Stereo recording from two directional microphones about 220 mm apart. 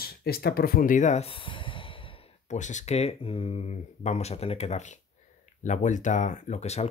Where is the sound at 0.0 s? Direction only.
45° left (ahead or behind).